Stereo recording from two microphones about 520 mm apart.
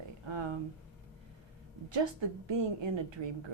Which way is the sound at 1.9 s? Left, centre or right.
Right.